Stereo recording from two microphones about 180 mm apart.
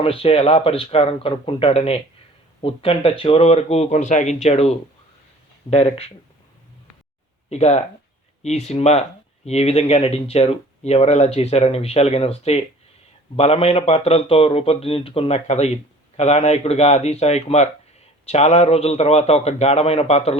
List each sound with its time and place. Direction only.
0.0 s a man's voice: 30° left (ahead or behind)
7.5 s a man's voice: 35° left (ahead or behind)